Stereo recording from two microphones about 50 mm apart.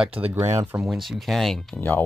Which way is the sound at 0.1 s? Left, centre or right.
Right.